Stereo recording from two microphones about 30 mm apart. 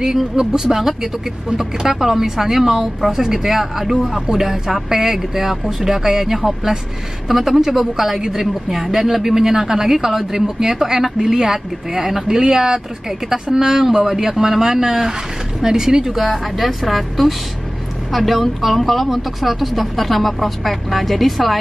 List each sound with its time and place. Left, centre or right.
0.4 s speech: centre